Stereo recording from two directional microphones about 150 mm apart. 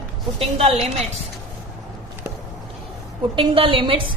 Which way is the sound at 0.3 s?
45° right (ahead or behind).